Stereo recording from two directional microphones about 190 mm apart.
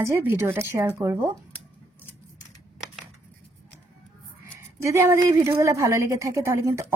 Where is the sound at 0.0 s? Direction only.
15° right (ahead or behind).